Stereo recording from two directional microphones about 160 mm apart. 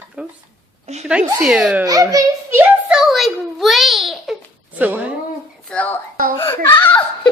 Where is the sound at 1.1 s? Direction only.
5° right (ahead or behind).